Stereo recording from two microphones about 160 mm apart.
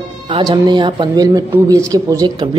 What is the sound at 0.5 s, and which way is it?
A woman's voice, 25° right (ahead or behind).